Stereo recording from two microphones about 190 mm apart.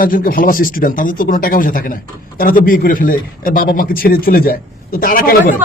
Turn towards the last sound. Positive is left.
turn(degrees=50)  # may be behind; listen again after turning